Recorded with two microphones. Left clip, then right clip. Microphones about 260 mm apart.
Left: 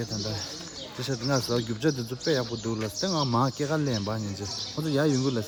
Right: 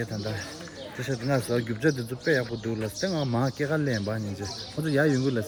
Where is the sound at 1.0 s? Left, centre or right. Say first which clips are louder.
Even; centre.